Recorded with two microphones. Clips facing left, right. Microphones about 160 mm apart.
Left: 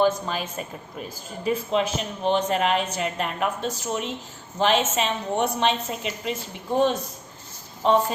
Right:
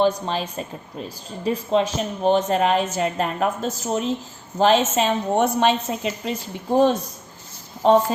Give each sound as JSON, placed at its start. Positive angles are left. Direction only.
{"t": 0.0, "sound": "speech", "side_deg": -30}